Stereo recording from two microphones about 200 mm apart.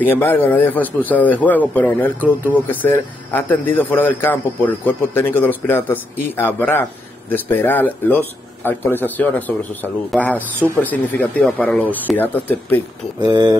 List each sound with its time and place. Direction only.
0.0 s speech: 10° left (ahead or behind)
13.2 s speech: 20° right (ahead or behind)